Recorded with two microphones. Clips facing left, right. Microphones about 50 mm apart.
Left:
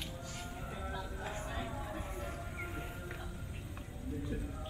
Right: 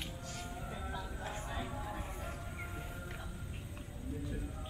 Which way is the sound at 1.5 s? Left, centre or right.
Centre.